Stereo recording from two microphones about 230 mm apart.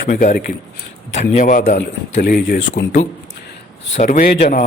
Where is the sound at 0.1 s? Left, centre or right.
Left.